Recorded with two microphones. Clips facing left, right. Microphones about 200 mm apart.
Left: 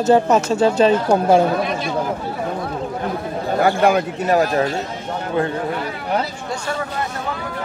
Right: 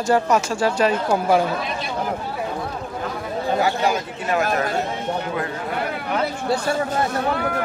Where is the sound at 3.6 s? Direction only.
55° left (ahead or behind).